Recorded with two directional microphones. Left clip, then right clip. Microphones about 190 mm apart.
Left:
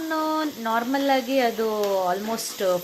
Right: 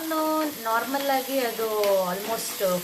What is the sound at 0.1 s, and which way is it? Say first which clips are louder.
Sizzle: even; 40° left (ahead or behind).